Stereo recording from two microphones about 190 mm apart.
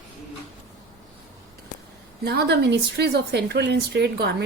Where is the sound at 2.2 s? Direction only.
60° right (ahead or behind).